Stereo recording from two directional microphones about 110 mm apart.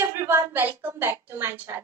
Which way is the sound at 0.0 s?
25° right (ahead or behind).